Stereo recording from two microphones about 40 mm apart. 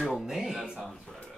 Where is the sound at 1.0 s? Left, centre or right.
Left.